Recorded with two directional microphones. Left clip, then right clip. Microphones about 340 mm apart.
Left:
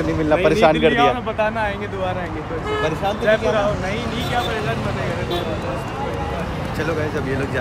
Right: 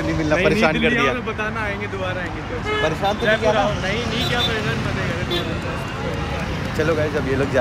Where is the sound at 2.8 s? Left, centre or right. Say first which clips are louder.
Left 1 dB; centre.